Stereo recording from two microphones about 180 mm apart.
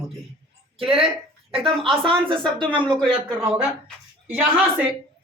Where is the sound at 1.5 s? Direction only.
30° right (ahead or behind).